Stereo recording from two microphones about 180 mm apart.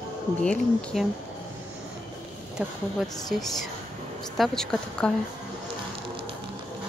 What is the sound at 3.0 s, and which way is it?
Speech, centre (ahead or behind).